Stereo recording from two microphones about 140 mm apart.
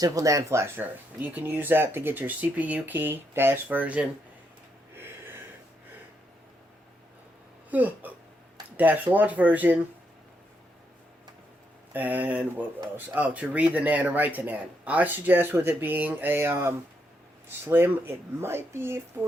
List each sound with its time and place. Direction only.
0.0 s speech: 25° right (ahead or behind)
4.9 s a sound: 15° right (ahead or behind)
7.7 s speech: 10° right (ahead or behind)
11.9 s speech: 10° right (ahead or behind)